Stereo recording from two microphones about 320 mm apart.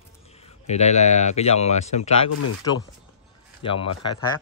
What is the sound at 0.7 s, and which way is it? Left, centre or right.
Speech, left.